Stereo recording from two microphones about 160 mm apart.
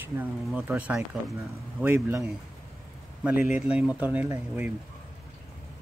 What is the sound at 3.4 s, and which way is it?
Speech, 10° right (ahead or behind).